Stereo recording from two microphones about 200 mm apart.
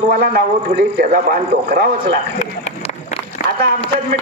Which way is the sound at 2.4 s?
35° left (ahead or behind).